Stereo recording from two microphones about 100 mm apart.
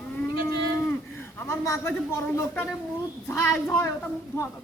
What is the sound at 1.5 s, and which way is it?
A woman's voice, 30° left (ahead or behind).